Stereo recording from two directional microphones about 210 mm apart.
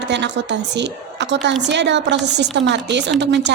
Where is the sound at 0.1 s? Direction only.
55° right (ahead or behind).